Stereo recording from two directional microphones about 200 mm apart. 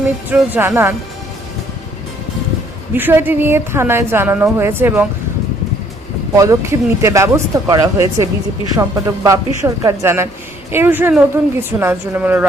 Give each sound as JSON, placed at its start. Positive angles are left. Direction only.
{"t": 0.3, "sound": "a woman's voice", "side_deg": -10}
{"t": 2.9, "sound": "a woman's voice", "side_deg": -10}
{"t": 6.3, "sound": "a woman's voice", "side_deg": -15}